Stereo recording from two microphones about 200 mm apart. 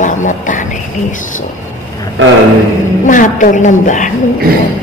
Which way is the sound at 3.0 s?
40° left (ahead or behind).